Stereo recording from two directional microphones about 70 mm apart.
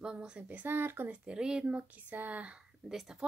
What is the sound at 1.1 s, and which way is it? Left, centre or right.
Speech, centre.